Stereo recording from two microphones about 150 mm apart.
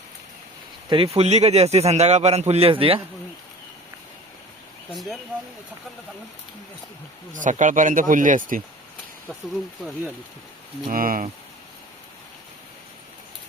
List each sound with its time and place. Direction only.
0.9 s speech: 40° right (ahead or behind)
4.9 s speech: centre (ahead or behind)
7.3 s speech: 60° right (ahead or behind)
10.8 s speech: 70° right (ahead or behind)